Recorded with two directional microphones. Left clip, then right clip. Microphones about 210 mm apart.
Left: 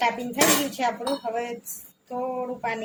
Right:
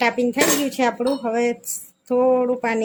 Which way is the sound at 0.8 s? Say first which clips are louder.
Right 6 dB; 55° right (ahead or behind).